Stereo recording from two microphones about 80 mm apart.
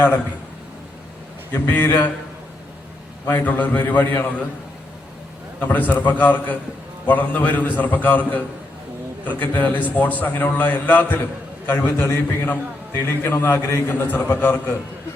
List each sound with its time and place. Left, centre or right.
1.5 s a man's voice: left
3.2 s a man's voice: left
5.5 s a man's voice: left